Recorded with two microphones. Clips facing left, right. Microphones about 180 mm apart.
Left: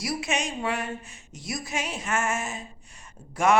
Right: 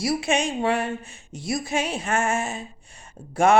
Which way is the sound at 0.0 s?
30° right (ahead or behind).